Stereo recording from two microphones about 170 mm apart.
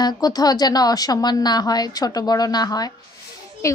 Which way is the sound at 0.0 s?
20° left (ahead or behind).